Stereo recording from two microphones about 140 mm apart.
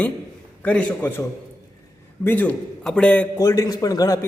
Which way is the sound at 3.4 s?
25° left (ahead or behind).